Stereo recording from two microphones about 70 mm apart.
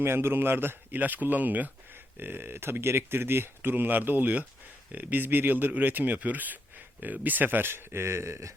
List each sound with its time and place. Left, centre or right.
0.0 s a man's voice: right